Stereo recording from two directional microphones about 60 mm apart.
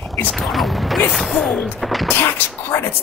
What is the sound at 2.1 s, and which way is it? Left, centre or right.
Speech, left.